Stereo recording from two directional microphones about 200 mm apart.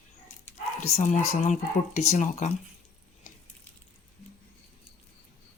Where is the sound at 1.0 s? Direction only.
35° left (ahead or behind).